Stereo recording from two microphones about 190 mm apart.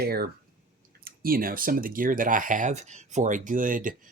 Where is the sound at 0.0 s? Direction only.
55° right (ahead or behind).